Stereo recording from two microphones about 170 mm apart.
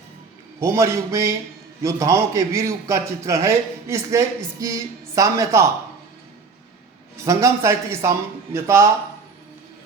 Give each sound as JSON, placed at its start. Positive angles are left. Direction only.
{"t": 0.6, "sound": "a man's voice", "side_deg": -15}
{"t": 7.3, "sound": "a man's voice", "side_deg": -15}